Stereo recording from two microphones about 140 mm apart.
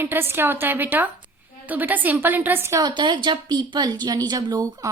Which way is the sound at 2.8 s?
35° right (ahead or behind).